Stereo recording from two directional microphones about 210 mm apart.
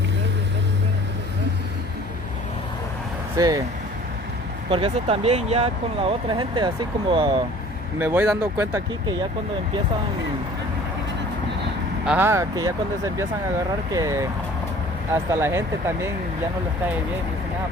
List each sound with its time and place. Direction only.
3.3 s speech: 15° right (ahead or behind)
4.7 s speech: 25° right (ahead or behind)
7.9 s speech: 10° right (ahead or behind)
12.0 s speech: 10° right (ahead or behind)
13.9 s speech: 15° right (ahead or behind)